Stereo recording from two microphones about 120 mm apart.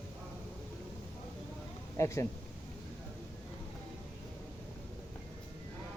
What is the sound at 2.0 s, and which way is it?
Speech, 25° left (ahead or behind).